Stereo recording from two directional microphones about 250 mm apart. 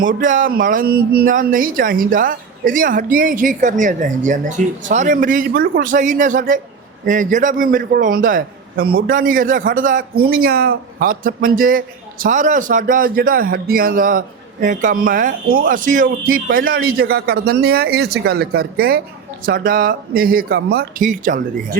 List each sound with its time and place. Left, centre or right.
0.0 s a man's voice: right